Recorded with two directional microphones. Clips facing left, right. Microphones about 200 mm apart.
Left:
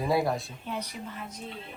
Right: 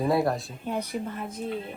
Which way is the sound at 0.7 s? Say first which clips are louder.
Right 6 dB; 50° right (ahead or behind).